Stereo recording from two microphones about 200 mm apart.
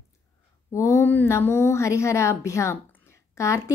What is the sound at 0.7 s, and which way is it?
A woman's voice, 15° left (ahead or behind).